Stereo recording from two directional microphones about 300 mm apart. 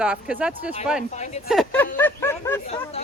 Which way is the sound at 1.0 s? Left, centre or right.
Left.